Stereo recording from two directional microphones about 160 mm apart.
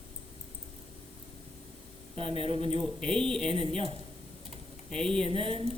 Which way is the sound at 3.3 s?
5° left (ahead or behind).